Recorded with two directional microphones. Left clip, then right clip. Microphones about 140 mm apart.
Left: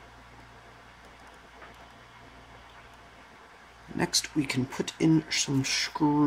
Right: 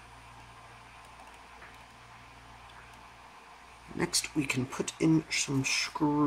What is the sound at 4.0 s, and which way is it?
Speech, 25° left (ahead or behind).